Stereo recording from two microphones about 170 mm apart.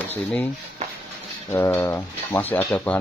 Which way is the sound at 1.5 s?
15° left (ahead or behind).